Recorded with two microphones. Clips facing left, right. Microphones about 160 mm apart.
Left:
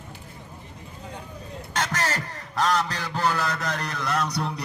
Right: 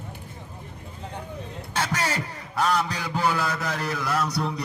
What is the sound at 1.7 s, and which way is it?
A man's voice, 10° right (ahead or behind).